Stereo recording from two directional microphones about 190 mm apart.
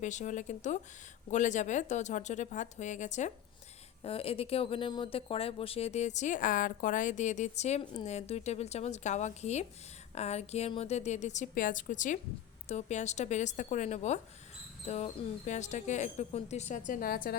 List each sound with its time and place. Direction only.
0.0 s speech: 40° left (ahead or behind)